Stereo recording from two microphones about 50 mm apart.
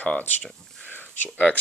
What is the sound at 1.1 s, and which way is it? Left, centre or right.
Speech, left.